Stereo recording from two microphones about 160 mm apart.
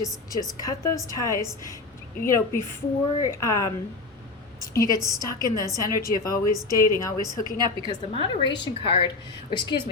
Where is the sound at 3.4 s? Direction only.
20° left (ahead or behind).